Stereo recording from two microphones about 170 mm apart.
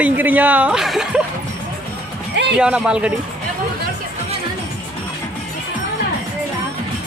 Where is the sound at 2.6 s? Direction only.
5° right (ahead or behind).